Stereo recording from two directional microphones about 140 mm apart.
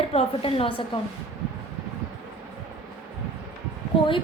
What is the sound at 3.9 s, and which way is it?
Speech, 40° left (ahead or behind).